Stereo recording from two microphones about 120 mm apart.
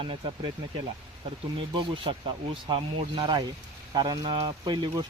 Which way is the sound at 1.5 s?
45° right (ahead or behind).